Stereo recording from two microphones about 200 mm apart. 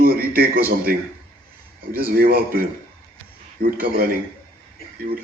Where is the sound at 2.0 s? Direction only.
45° right (ahead or behind).